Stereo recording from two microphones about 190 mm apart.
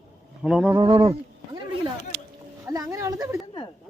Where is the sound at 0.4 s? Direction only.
5° right (ahead or behind).